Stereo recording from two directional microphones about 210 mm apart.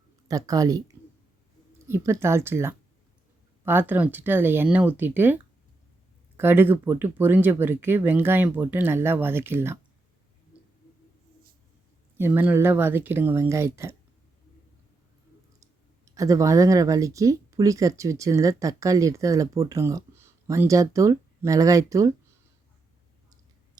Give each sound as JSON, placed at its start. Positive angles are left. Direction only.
{"t": 0.3, "sound": "speech", "side_deg": -15}
{"t": 12.1, "sound": "speech", "side_deg": -10}
{"t": 16.0, "sound": "speech", "side_deg": -15}